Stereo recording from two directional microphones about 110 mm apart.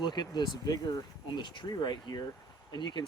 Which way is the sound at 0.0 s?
40° left (ahead or behind).